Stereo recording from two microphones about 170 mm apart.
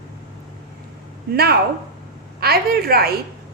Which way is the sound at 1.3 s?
65° right (ahead or behind).